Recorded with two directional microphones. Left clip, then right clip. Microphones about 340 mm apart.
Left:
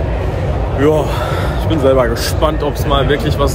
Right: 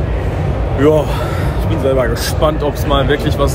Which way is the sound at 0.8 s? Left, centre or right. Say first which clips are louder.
Right 1 dB; centre.